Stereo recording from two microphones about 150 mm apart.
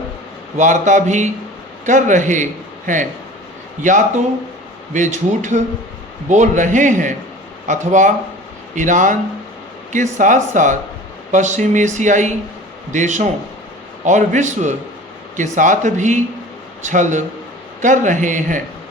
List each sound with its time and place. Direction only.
0.5 s a man's voice: 55° right (ahead or behind)